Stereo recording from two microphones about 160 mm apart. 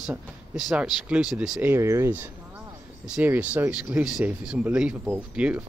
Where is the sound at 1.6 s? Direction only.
15° right (ahead or behind).